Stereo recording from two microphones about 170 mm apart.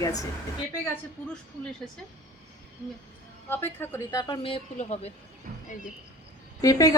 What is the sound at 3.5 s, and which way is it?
A woman's voice, 15° left (ahead or behind).